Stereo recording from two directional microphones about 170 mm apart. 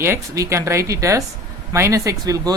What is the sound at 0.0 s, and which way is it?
Speech, 15° right (ahead or behind).